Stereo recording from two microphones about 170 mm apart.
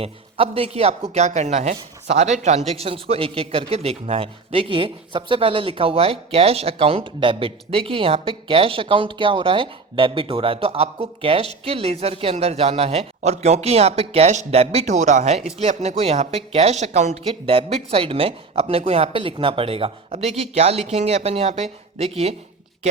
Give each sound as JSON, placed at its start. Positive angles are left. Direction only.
{"t": 0.0, "sound": "speech", "side_deg": -35}